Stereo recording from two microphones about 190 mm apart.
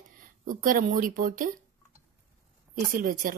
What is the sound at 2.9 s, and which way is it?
Speech, 45° right (ahead or behind).